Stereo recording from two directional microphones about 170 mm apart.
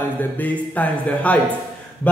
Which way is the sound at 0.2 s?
10° left (ahead or behind).